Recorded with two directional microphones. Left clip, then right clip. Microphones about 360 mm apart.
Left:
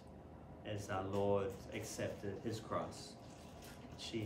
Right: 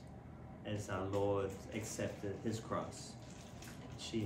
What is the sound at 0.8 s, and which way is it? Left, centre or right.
Speech, centre.